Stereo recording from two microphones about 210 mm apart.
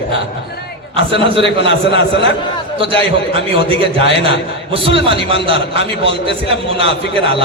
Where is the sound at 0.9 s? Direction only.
25° right (ahead or behind).